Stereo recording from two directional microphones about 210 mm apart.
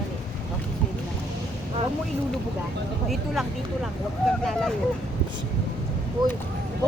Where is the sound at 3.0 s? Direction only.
Centre (ahead or behind).